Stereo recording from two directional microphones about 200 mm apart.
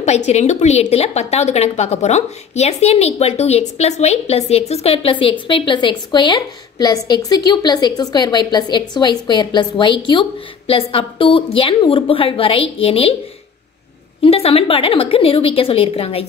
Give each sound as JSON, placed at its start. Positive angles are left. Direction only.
{"t": 0.3, "sound": "a woman's voice", "side_deg": 35}
{"t": 14.2, "sound": "a woman's voice", "side_deg": 30}